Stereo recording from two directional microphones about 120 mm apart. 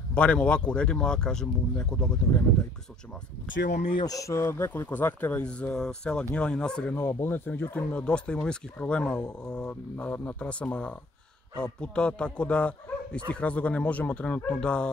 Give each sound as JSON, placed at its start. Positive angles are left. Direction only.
{"t": 0.1, "sound": "speech", "side_deg": 10}
{"t": 3.8, "sound": "speech", "side_deg": 35}